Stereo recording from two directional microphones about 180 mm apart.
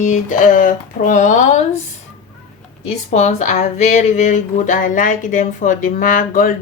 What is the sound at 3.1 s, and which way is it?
Speech, 40° left (ahead or behind).